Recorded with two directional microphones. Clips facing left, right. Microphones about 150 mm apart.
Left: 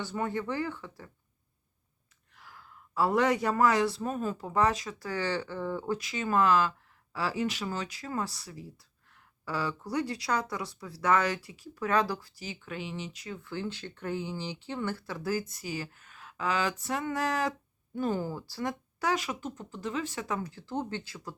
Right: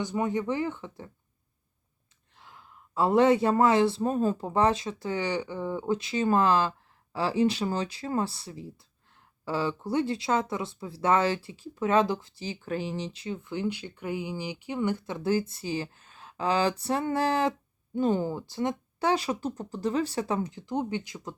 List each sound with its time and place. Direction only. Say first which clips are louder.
0.0 s speech: right 4 dB; 15° right (ahead or behind)
2.3 s speech: right 1 dB; 25° right (ahead or behind)
6.0 s speech: right 3 dB; 30° right (ahead or behind)
20.5 s speech: right 4 dB; 15° right (ahead or behind)